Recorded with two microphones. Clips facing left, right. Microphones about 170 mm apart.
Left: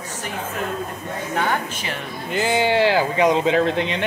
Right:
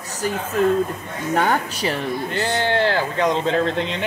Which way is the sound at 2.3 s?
5° left (ahead or behind).